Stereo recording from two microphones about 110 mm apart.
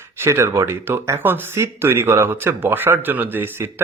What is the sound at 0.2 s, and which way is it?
Speech, 25° right (ahead or behind).